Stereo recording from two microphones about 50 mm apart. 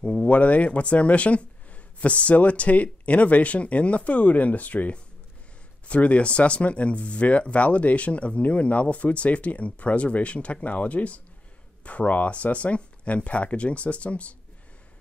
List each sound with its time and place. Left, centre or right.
0.0 s speech: left